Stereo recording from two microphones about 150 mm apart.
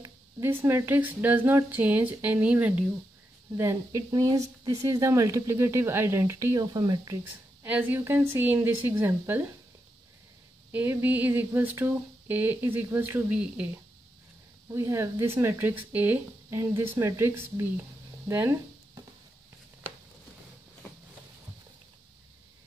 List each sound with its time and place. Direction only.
0.0 s speech: 15° right (ahead or behind)
7.6 s speech: 10° right (ahead or behind)
10.7 s speech: 15° right (ahead or behind)
14.7 s speech: 20° right (ahead or behind)